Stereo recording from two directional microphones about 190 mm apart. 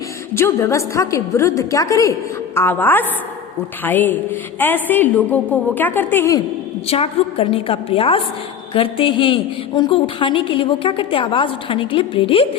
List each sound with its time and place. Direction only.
0.3 s a woman's voice: 15° left (ahead or behind)
6.8 s a woman's voice: 30° left (ahead or behind)